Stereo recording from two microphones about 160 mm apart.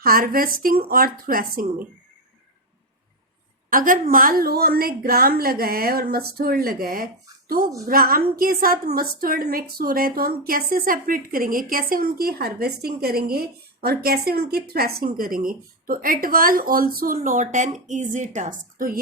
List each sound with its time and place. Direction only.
0.0 s a woman's voice: 65° right (ahead or behind)
3.7 s a woman's voice: 60° right (ahead or behind)